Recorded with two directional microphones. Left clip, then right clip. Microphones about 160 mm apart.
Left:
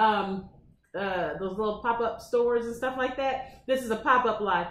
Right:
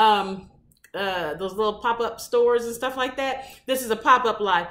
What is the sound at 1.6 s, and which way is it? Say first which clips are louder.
Speech: right 5 dB; 15° right (ahead or behind).